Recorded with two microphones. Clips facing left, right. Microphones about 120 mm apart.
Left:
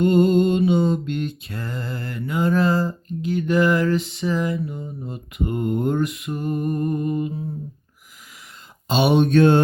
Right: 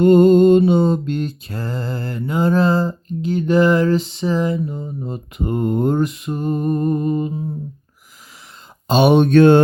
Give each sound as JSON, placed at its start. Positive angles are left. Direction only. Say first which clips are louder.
{"t": 0.0, "sound": "mantra", "louder": "right 6 dB", "side_deg": -45}
{"t": 8.9, "sound": "speech", "louder": "right 5 dB", "side_deg": -50}